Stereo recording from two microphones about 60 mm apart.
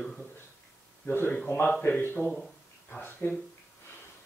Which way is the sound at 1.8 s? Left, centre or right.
Left.